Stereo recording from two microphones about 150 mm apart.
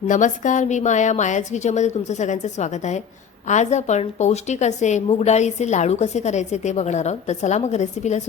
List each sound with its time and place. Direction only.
0.1 s a woman's voice: 55° left (ahead or behind)